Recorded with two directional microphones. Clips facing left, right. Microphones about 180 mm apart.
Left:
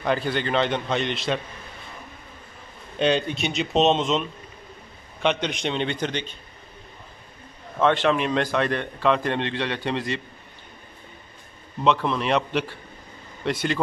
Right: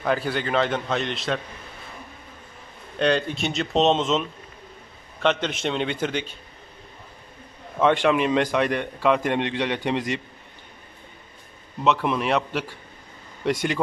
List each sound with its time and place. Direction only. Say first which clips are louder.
0.0 s a man's voice: even; 5° right (ahead or behind)
3.0 s a man's voice: even; centre (ahead or behind)
3.3 s speech: even; 20° left (ahead or behind)
3.8 s a man's voice: right 1 dB; centre (ahead or behind)
7.8 s a man's voice: right 1 dB; 10° right (ahead or behind)
11.8 s a man's voice: even; 10° right (ahead or behind)